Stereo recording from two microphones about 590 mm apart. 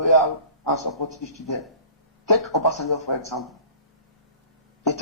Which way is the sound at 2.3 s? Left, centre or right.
Left.